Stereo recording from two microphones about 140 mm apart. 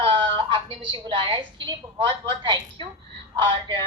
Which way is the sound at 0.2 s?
35° right (ahead or behind).